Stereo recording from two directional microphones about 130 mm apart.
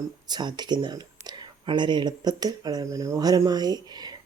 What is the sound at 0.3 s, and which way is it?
Speech, 35° right (ahead or behind).